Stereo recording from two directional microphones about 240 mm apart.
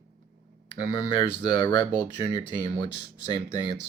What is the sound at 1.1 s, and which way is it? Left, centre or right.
Speech, centre.